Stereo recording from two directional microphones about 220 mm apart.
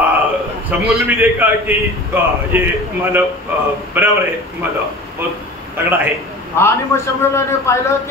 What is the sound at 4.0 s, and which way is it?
Speech, 10° right (ahead or behind).